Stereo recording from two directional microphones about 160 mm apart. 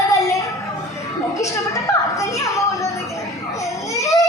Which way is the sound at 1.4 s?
20° left (ahead or behind).